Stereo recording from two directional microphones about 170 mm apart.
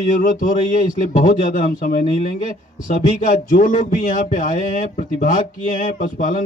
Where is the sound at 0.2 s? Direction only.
45° left (ahead or behind).